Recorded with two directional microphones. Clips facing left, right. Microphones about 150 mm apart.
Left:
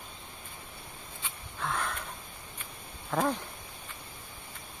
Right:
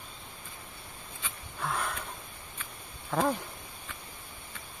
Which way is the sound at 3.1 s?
5° right (ahead or behind).